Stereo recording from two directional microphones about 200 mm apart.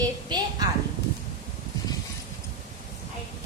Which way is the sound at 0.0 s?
20° right (ahead or behind).